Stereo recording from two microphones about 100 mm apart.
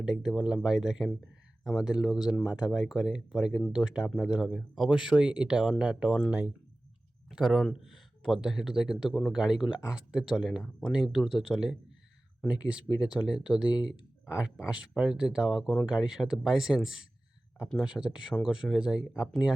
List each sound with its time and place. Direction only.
0.0 s speech: 5° right (ahead or behind)
12.9 s speech: 20° left (ahead or behind)
13.2 s speech: 5° right (ahead or behind)
13.7 s speech: 45° left (ahead or behind)
14.3 s speech: 10° right (ahead or behind)